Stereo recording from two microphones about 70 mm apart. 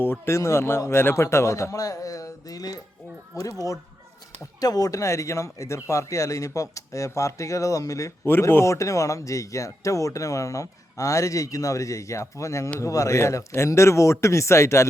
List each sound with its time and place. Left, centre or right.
0.0 s speech: left
4.6 s speech: left
8.2 s speech: left